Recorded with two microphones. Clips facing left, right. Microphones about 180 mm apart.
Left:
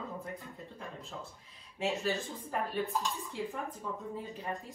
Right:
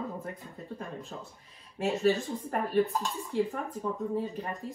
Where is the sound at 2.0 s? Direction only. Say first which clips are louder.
Right 8 dB; 60° right (ahead or behind).